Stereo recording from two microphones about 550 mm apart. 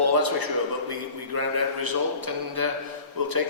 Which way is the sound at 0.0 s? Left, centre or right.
Right.